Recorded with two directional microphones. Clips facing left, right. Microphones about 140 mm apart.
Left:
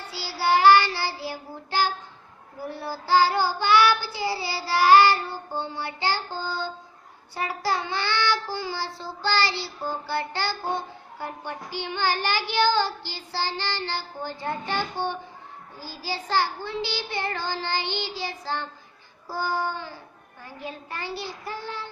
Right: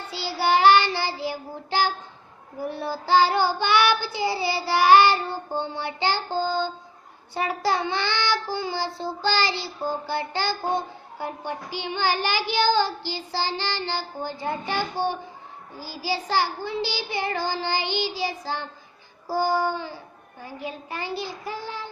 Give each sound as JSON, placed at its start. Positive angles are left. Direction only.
{"t": 0.3, "sound": "child singing", "side_deg": -20}
{"t": 9.0, "sound": "a child's voice", "side_deg": -15}